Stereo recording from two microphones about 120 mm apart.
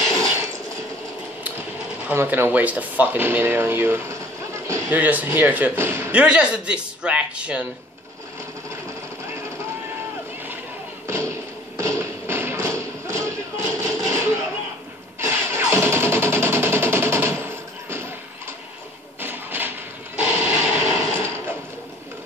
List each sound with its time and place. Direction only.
2.0 s a man's voice: 15° right (ahead or behind)
6.2 s speech: 10° right (ahead or behind)
11.1 s tap: 25° right (ahead or behind)
15.1 s music: 20° right (ahead or behind)
19.1 s a sound: 15° right (ahead or behind)